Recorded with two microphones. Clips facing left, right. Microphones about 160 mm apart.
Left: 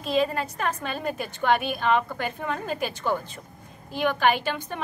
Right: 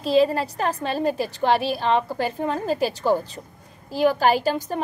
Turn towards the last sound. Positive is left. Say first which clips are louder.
# right 5 dB
turn(degrees=-35)  # may be behind; listen again after turning